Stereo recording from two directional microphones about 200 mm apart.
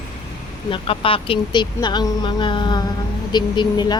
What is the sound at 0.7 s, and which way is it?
Speech, 25° left (ahead or behind).